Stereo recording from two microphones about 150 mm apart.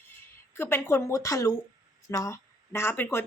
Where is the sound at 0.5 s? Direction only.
15° left (ahead or behind).